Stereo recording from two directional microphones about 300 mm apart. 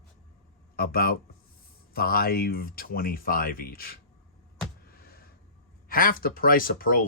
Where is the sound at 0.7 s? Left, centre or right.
Left.